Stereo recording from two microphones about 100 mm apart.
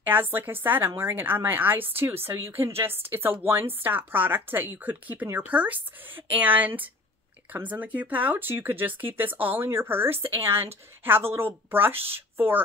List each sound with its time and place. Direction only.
0.0 s speech: 20° right (ahead or behind)
10.0 s speech: 75° right (ahead or behind)
10.4 s speech: 25° right (ahead or behind)